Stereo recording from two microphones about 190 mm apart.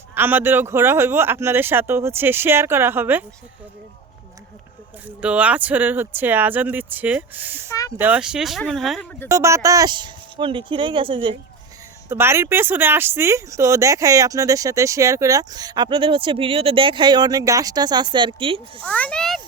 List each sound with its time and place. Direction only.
0.1 s speech: 10° right (ahead or behind)
5.2 s speech: 5° right (ahead or behind)
7.7 s speech: 15° left (ahead or behind)
7.9 s speech: 10° right (ahead or behind)
9.3 s speech: 15° right (ahead or behind)
12.0 s speech: 15° right (ahead or behind); by 18.6 s 30° right (ahead or behind)
18.8 s a child's voice: 5° left (ahead or behind)